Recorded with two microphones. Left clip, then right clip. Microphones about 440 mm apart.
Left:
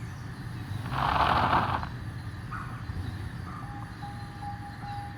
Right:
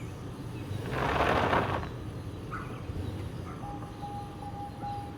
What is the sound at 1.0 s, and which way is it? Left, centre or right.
Vehicle, centre.